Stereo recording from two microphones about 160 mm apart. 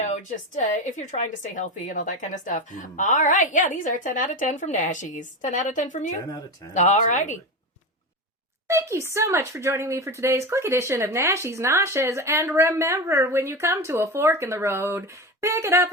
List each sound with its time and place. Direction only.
0.0 s a woman's voice: 50° left (ahead or behind)
8.6 s speech: 20° right (ahead or behind)